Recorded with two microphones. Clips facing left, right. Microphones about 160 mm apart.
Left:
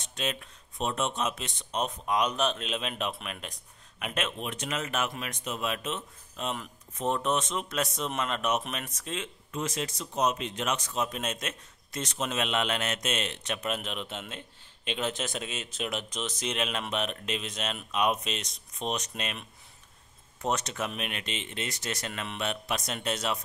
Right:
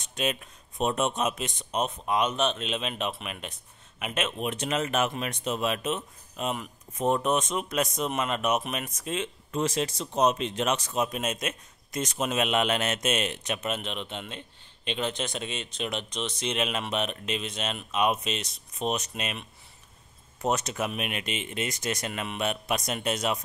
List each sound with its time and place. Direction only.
0.1 s speech: 15° right (ahead or behind)
1.8 s speech: 5° right (ahead or behind)
4.5 s speech: 25° right (ahead or behind); by 9.2 s 10° right (ahead or behind)
9.2 s speech: 30° right (ahead or behind)
11.0 s speech: 10° right (ahead or behind)
20.4 s speech: 10° right (ahead or behind)